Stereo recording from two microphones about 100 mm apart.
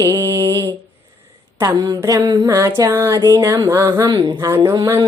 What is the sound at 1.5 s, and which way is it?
Mantra, 40° right (ahead or behind).